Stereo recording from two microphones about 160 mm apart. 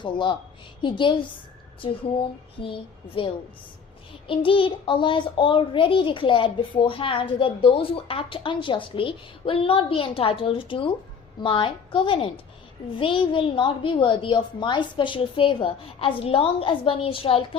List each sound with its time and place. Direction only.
0.0 s a woman's voice: 30° left (ahead or behind)
3.2 s a child's voice: 35° left (ahead or behind)